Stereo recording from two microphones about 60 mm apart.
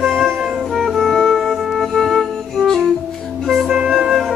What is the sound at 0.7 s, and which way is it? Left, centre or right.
Music, centre.